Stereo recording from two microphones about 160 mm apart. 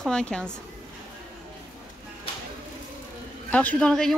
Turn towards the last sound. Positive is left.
turn(degrees=5)  # may be behind; listen again after turning